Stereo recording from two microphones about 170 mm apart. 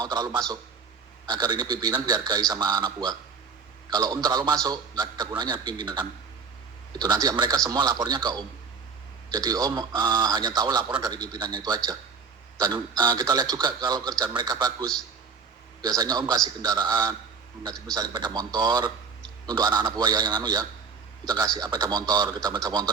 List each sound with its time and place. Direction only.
0.0 s a man's voice: 25° right (ahead or behind)